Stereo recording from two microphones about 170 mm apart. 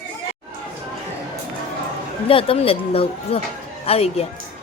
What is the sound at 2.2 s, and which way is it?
Speech, 35° left (ahead or behind).